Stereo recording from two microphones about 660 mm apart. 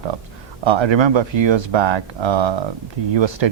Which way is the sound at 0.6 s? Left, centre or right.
Right.